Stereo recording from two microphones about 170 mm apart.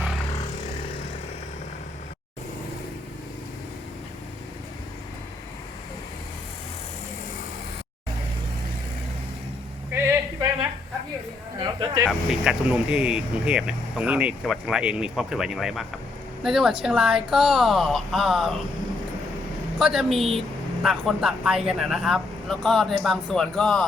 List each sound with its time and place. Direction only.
9.9 s a sound: 15° right (ahead or behind)
11.6 s speech: 25° right (ahead or behind)
12.0 s speech: 5° right (ahead or behind)
19.8 s speech: centre (ahead or behind)